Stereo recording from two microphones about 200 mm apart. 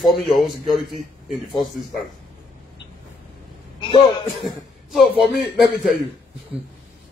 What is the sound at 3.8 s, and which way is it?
Speech, 25° left (ahead or behind).